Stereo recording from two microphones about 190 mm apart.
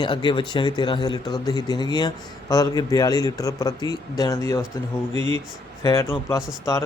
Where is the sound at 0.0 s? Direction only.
25° left (ahead or behind).